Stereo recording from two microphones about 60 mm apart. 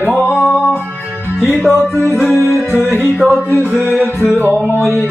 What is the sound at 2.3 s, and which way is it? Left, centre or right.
Music, left.